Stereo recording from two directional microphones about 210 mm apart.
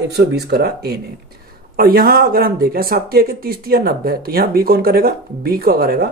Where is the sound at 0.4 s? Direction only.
50° right (ahead or behind).